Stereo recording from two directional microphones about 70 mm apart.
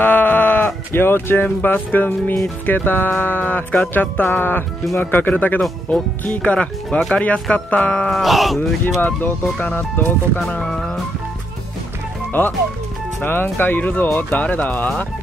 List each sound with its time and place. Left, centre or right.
0.0 s sheep: left
0.9 s speech: left
8.1 s speech: centre
8.5 s speech: left
10.6 s speech: centre
12.3 s speech: left